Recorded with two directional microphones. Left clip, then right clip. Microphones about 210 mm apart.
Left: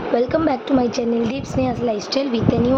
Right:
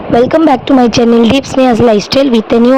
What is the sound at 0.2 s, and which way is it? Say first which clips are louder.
A woman's voice: right 15 dB; 40° right (ahead or behind).